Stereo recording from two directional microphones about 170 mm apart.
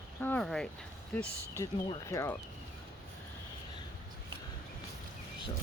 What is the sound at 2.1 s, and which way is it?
Speech, 20° left (ahead or behind).